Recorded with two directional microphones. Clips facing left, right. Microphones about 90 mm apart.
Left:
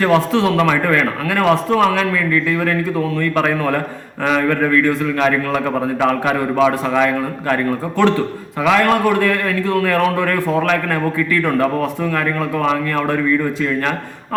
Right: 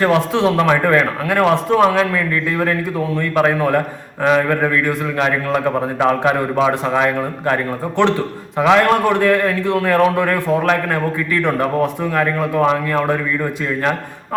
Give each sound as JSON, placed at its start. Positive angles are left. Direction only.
{"t": 0.0, "sound": "a man's voice", "side_deg": -20}